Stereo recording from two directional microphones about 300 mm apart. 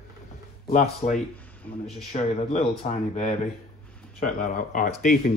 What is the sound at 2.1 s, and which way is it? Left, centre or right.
Speech, centre.